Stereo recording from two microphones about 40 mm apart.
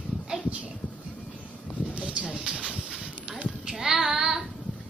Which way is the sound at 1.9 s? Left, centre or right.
Right.